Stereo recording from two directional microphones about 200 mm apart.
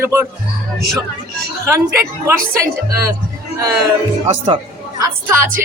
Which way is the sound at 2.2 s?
15° right (ahead or behind).